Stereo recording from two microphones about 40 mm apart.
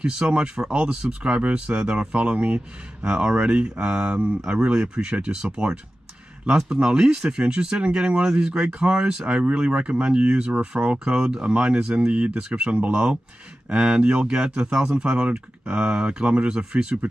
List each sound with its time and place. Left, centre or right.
0.0 s speech: centre
1.2 s speech: right
3.5 s speech: right
6.5 s speech: centre